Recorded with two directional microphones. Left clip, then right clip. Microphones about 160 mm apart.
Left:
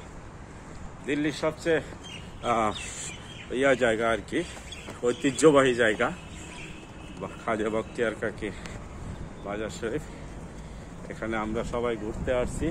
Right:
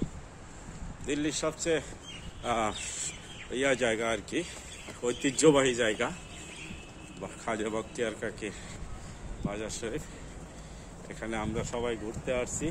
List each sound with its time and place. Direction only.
1.0 s speech: 25° right (ahead or behind)
2.4 s speech: 15° right (ahead or behind)
7.2 s speech: 25° right (ahead or behind)
11.1 s speech: 20° right (ahead or behind)